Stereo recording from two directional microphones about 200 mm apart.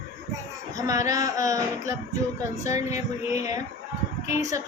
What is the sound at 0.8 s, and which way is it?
Speech, 15° right (ahead or behind).